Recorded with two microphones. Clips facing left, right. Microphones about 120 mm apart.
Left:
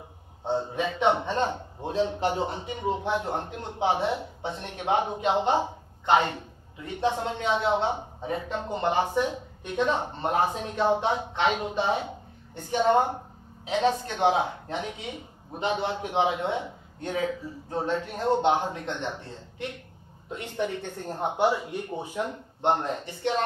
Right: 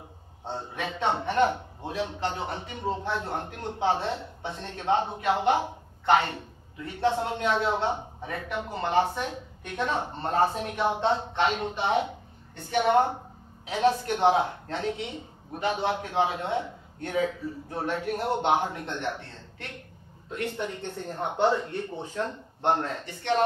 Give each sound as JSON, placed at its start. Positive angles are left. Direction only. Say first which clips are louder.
{"t": 0.4, "sound": "a man's voice", "louder": "left 6 dB", "side_deg": 15}
{"t": 13.7, "sound": "a man's voice", "louder": "right 1 dB", "side_deg": 20}
{"t": 18.3, "sound": "speech", "louder": "left 2 dB", "side_deg": -15}
{"t": 18.9, "sound": "a man's voice", "louder": "even", "side_deg": 15}